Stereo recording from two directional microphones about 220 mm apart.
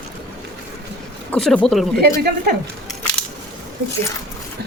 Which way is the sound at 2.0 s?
45° right (ahead or behind).